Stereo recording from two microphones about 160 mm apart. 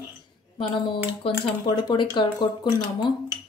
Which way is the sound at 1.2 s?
35° left (ahead or behind).